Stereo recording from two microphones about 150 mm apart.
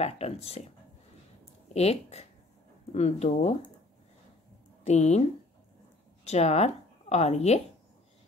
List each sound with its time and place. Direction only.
0.0 s speech: 45° left (ahead or behind)
1.7 s speech: 45° left (ahead or behind)
4.8 s speech: 50° left (ahead or behind)
6.2 s speech: 45° left (ahead or behind)